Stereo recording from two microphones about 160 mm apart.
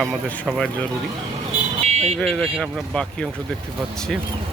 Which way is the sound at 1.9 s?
45° right (ahead or behind).